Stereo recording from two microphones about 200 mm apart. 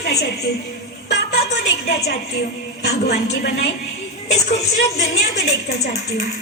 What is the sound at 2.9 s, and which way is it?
Speech, 55° left (ahead or behind).